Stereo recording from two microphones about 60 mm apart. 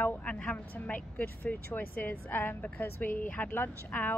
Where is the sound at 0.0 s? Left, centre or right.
Left.